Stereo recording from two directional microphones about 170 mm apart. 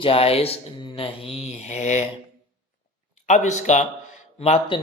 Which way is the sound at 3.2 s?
45° left (ahead or behind).